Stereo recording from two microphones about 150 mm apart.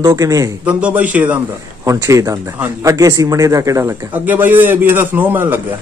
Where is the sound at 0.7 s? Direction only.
10° right (ahead or behind).